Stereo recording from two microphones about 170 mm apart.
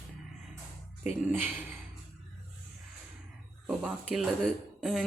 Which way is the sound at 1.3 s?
10° right (ahead or behind).